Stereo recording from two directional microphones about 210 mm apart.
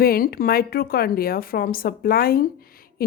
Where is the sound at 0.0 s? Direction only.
45° left (ahead or behind).